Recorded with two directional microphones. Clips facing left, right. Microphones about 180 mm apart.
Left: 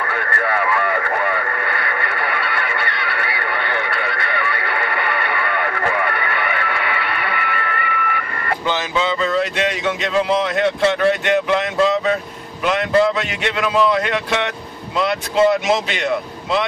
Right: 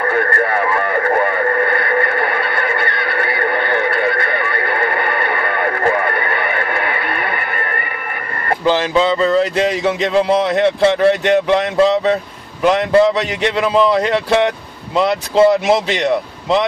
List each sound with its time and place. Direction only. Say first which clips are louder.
0.0 s radio: right 6 dB; 40° right (ahead or behind)
9.4 s speech: right 5 dB; 35° right (ahead or behind)
13.6 s speech: right 3 dB; 35° right (ahead or behind)